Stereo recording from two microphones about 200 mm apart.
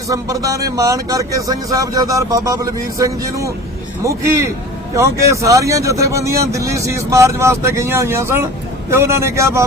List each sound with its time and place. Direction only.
0.1 s speech: 15° right (ahead or behind)
4.9 s speech: 15° right (ahead or behind)